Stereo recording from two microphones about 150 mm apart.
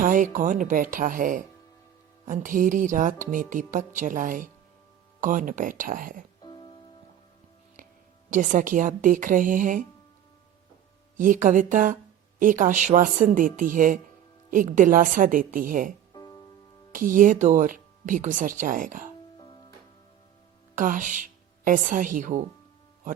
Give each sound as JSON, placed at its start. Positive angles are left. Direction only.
{"t": 0.0, "sound": "speech", "side_deg": -60}
{"t": 6.4, "sound": "music", "side_deg": 30}
{"t": 8.3, "sound": "speech", "side_deg": -60}
{"t": 11.2, "sound": "speech", "side_deg": -60}
{"t": 16.1, "sound": "music", "side_deg": 25}
{"t": 16.9, "sound": "speech", "side_deg": -65}
{"t": 20.7, "sound": "a woman's voice", "side_deg": -60}